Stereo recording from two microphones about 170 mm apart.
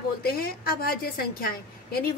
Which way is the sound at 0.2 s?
60° left (ahead or behind).